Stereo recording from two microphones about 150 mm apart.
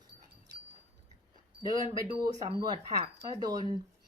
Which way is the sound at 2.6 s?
30° right (ahead or behind).